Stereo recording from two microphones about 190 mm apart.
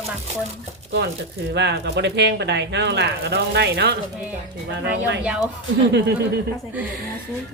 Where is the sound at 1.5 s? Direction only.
60° right (ahead or behind).